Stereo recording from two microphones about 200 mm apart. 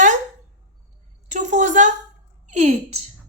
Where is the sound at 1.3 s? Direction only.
35° right (ahead or behind).